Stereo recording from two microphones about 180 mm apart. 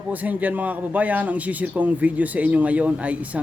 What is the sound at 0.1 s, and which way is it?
A man's voice, 10° right (ahead or behind).